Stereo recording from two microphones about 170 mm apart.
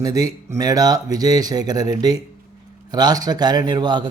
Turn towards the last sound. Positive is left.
turn(degrees=-25)  # may be behind; listen again after turning